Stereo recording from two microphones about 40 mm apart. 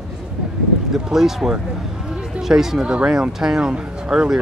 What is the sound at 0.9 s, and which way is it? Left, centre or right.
Speech, centre.